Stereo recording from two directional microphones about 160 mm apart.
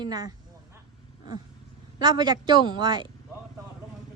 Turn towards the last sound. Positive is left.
turn(degrees=-30)  # may be behind; listen again after turning